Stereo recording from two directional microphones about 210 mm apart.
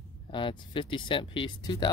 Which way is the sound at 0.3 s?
25° left (ahead or behind).